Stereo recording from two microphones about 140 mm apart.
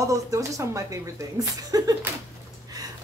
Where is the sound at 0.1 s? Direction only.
20° right (ahead or behind).